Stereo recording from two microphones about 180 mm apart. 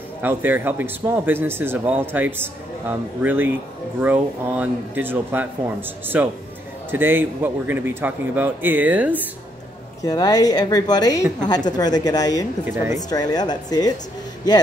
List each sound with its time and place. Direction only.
0.2 s a man's voice: 10° right (ahead or behind)
10.0 s a woman's voice: 20° left (ahead or behind)